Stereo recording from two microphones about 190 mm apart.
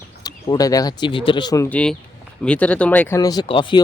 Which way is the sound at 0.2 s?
20° left (ahead or behind).